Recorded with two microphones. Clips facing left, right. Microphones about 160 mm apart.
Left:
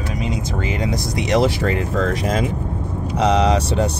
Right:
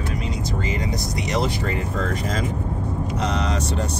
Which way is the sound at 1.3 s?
90° left.